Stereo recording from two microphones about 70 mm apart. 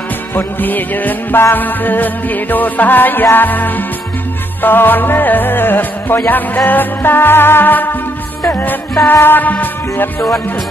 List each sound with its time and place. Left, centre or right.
0.3 s music: left